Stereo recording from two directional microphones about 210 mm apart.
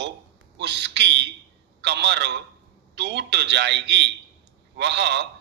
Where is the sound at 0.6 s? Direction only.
55° right (ahead or behind).